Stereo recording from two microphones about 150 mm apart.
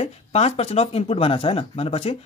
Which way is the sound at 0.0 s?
45° left (ahead or behind).